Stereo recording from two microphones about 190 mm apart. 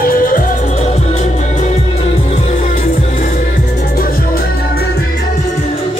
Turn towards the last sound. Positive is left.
turn(degrees=50)  # may be behind; listen again after turning